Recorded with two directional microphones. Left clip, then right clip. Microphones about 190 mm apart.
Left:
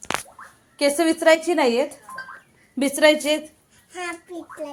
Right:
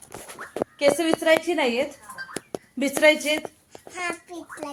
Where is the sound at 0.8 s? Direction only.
25° left (ahead or behind).